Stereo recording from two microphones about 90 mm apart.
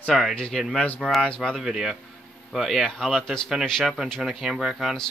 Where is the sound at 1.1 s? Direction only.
5° left (ahead or behind).